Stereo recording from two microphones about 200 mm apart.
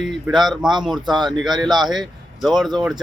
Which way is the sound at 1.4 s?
Centre (ahead or behind).